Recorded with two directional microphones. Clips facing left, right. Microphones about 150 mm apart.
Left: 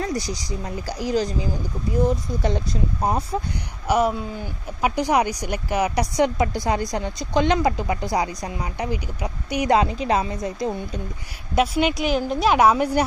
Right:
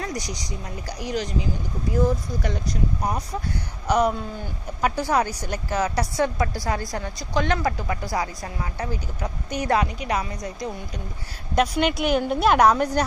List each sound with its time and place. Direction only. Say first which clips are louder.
0.0 s a woman's voice: left 4 dB; 30° left (ahead or behind)
3.8 s a woman's voice: left 1 dB; 5° left (ahead or behind)
9.7 s a woman's voice: left 4 dB; 25° left (ahead or behind)
11.5 s a woman's voice: left 1 dB; 5° left (ahead or behind)